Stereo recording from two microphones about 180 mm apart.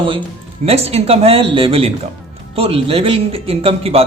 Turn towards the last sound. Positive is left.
turn(degrees=-30)  # may be behind; listen again after turning